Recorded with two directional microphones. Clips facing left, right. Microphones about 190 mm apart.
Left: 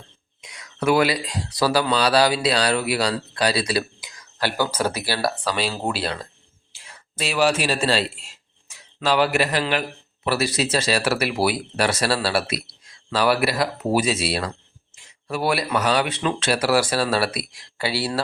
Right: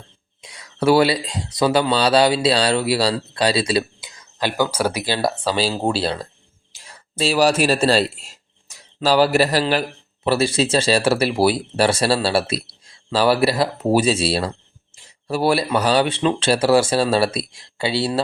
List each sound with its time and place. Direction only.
0.4 s a man's voice: 30° right (ahead or behind)